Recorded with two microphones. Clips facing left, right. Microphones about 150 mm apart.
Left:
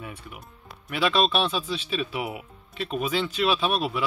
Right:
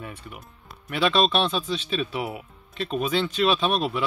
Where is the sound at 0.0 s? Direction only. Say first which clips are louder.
Right 1 dB; 5° left (ahead or behind).